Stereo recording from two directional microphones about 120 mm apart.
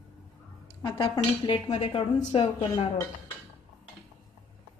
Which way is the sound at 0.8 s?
40° left (ahead or behind).